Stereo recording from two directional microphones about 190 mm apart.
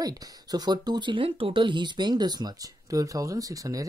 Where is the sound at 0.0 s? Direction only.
20° right (ahead or behind).